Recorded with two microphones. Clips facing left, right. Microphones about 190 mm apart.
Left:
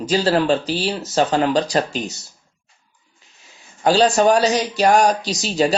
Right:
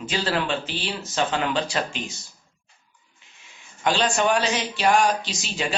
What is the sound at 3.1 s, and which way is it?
Speech, 35° left (ahead or behind).